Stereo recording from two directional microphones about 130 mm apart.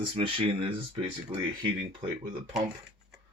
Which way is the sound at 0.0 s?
40° right (ahead or behind).